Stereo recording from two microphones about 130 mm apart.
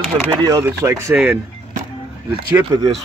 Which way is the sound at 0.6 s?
20° right (ahead or behind).